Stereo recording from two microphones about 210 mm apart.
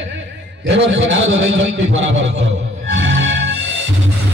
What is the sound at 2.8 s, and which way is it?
Music, 60° right (ahead or behind).